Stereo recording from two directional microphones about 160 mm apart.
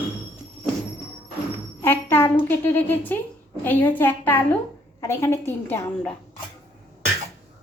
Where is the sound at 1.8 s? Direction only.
15° left (ahead or behind).